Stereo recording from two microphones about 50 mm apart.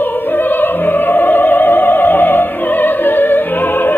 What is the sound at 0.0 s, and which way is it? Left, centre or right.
Opera, left.